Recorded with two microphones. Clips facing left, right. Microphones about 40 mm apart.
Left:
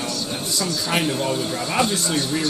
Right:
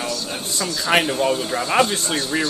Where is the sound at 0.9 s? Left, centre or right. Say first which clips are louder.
Right 5 dB; right.